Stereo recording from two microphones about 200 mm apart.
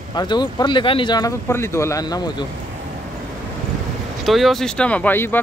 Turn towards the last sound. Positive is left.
turn(degrees=10)  # may be behind; listen again after turning